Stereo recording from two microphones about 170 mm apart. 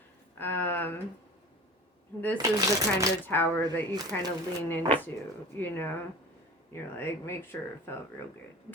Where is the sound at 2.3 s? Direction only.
20° right (ahead or behind).